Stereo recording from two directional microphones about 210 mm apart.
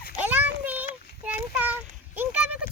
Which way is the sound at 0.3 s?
10° right (ahead or behind).